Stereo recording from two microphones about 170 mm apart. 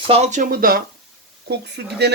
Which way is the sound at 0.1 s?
40° right (ahead or behind).